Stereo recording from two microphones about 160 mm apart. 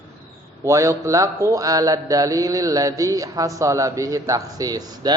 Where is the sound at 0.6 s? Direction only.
20° right (ahead or behind).